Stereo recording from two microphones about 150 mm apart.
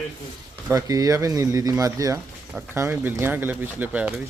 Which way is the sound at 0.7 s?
25° right (ahead or behind).